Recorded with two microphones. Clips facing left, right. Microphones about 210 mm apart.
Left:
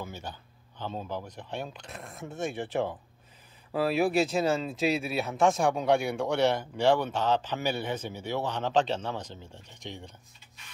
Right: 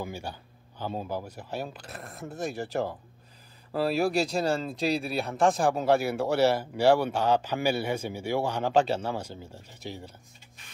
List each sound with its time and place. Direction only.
0.0 s speech: 10° right (ahead or behind)